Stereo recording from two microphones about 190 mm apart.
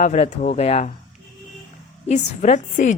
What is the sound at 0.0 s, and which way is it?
Speech, 40° left (ahead or behind).